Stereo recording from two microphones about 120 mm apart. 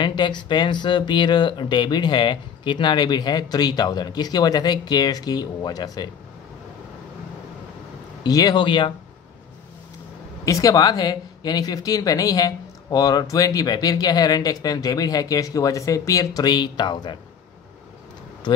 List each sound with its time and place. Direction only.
0.0 s speech: 40° left (ahead or behind)
8.2 s speech: 35° left (ahead or behind)
10.4 s speech: 25° left (ahead or behind)